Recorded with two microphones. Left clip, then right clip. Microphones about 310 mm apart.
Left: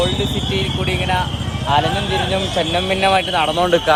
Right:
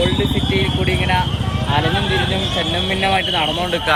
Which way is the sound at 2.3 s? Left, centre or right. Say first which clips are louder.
Left 1 dB; centre.